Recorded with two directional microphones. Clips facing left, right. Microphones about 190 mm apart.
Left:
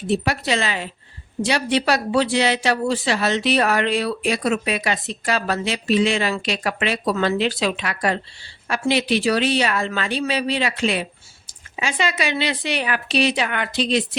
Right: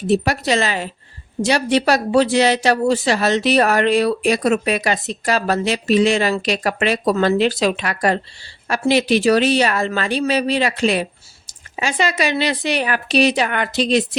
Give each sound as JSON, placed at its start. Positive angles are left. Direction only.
{"t": 0.1, "sound": "a woman's voice", "side_deg": -40}